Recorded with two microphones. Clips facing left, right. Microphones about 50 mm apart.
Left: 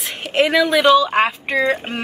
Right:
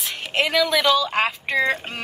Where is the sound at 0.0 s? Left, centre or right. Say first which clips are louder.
Left 5 dB; left.